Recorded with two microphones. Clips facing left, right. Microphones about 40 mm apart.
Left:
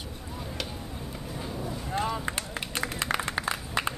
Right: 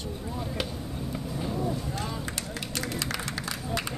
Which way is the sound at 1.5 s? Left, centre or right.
Centre.